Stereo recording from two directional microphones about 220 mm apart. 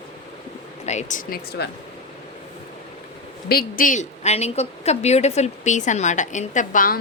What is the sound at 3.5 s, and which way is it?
A woman's voice, 40° left (ahead or behind).